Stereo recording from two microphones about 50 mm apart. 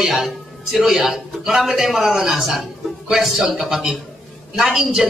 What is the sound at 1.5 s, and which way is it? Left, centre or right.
Speech, right.